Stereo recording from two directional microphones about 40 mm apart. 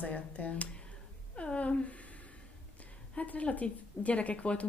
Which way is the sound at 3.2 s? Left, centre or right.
Left.